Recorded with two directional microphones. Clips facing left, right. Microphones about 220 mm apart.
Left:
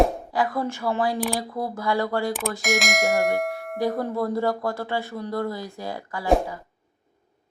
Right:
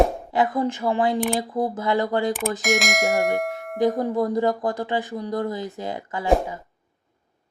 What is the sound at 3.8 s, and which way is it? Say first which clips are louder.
Speech: right 4 dB; 15° right (ahead or behind).